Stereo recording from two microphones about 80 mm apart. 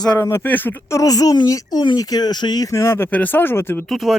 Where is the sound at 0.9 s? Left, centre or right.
Left.